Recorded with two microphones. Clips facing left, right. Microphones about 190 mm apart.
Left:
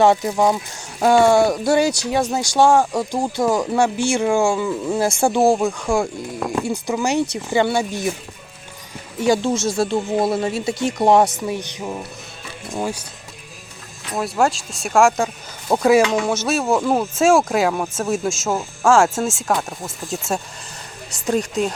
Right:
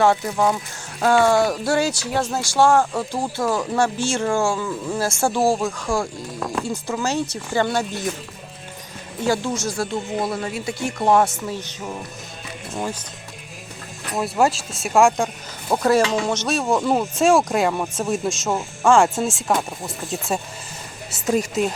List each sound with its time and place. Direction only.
0.0 s speech: 15° left (ahead or behind)
9.2 s speech: 20° left (ahead or behind)
14.2 s speech: centre (ahead or behind)